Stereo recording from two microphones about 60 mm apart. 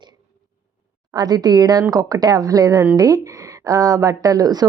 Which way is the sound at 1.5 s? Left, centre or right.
Right.